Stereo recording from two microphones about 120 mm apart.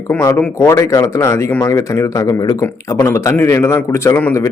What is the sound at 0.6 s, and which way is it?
A man's voice, 25° left (ahead or behind).